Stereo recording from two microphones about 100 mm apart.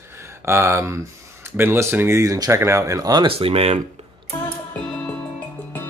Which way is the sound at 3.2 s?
75° right (ahead or behind).